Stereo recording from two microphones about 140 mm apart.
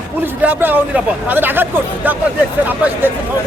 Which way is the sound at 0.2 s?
15° right (ahead or behind).